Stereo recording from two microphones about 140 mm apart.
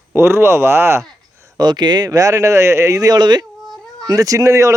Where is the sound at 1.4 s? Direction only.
30° right (ahead or behind).